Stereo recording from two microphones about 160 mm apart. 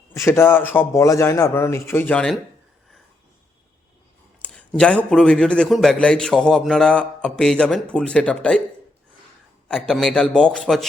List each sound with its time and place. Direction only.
0.1 s a man's voice: 15° left (ahead or behind)
4.4 s a man's voice: 5° left (ahead or behind)
9.6 s a man's voice: 5° left (ahead or behind)